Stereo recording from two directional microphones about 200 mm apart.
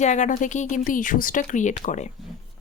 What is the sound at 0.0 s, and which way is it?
Speech, 35° left (ahead or behind).